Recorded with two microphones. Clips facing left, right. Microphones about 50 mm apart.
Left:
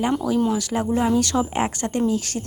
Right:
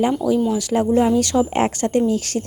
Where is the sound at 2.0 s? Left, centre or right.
Right.